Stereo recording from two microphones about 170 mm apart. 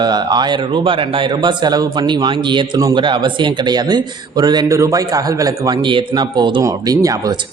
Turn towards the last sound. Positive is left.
turn(degrees=-20)  # may be behind; listen again after turning